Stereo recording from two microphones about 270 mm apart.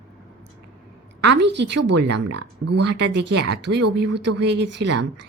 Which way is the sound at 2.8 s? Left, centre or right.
Right.